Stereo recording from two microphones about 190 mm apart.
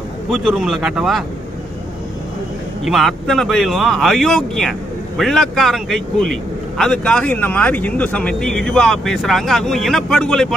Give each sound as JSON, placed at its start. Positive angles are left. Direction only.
{"t": 0.3, "sound": "speech", "side_deg": -5}
{"t": 2.8, "sound": "speech", "side_deg": 0}